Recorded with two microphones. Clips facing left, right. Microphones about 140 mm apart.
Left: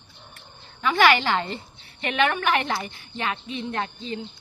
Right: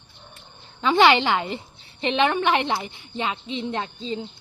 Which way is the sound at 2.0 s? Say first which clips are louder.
Right 2 dB; 25° right (ahead or behind).